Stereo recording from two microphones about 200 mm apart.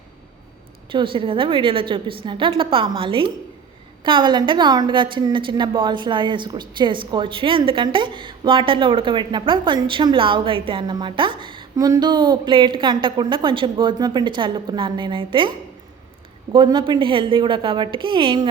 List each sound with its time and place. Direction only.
0.9 s a woman's voice: 25° right (ahead or behind)